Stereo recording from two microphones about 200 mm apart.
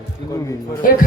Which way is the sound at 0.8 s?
45° left (ahead or behind).